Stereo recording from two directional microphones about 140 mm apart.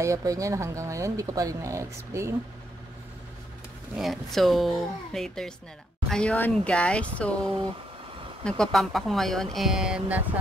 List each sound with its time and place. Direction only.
0.0 s speech: 25° right (ahead or behind)
3.9 s speech: centre (ahead or behind)